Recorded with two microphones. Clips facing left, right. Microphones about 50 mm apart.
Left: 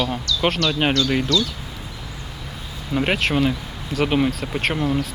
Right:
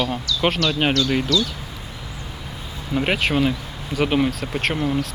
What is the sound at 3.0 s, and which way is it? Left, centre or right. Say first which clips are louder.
Speech: even; centre.